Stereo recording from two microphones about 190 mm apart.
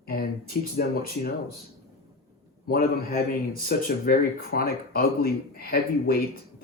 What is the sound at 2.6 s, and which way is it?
Speech, 50° left (ahead or behind).